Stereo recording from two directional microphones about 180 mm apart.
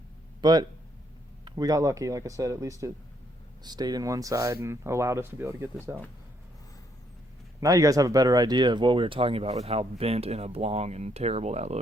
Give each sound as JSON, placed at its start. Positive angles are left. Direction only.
{"t": 0.4, "sound": "speech", "side_deg": -25}
{"t": 7.6, "sound": "speech", "side_deg": -20}